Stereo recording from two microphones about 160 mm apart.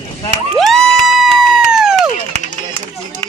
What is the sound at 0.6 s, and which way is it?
Crowd, centre (ahead or behind).